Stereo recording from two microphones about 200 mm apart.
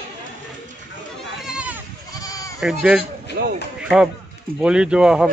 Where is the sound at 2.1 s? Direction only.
15° left (ahead or behind).